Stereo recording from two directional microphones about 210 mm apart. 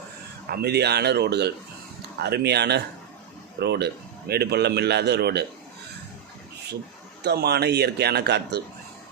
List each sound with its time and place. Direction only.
0.5 s a man's voice: 50° right (ahead or behind)
7.2 s a man's voice: 50° right (ahead or behind)